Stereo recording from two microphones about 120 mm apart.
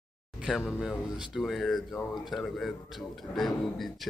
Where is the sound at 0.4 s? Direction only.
Centre (ahead or behind).